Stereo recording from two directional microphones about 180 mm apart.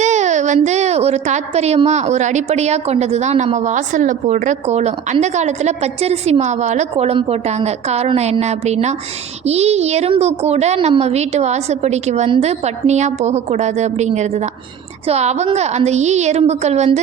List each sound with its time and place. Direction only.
0.0 s a woman's voice: 40° right (ahead or behind)